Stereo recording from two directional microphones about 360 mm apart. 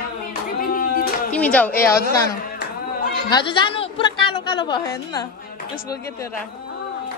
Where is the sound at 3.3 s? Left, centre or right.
Centre.